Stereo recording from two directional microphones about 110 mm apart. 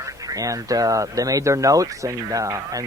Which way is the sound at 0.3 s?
30° right (ahead or behind).